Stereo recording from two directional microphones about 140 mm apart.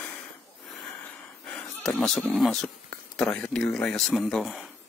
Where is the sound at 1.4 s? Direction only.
5° left (ahead or behind).